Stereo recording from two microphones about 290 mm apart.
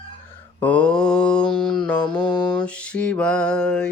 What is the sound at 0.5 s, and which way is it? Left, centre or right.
Mantra, centre.